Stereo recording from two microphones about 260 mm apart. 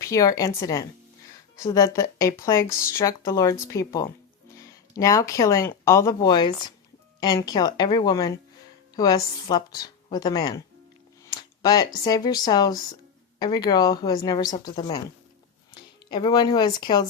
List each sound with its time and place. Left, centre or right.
0.0 s speech: centre
11.3 s a sound: centre
12.0 s speech: centre